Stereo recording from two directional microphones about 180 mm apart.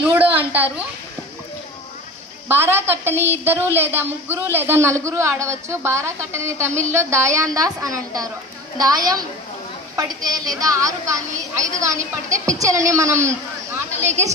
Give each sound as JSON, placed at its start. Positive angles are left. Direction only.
{"t": 0.1, "sound": "a woman's voice", "side_deg": -10}
{"t": 2.4, "sound": "a man's voice", "side_deg": -15}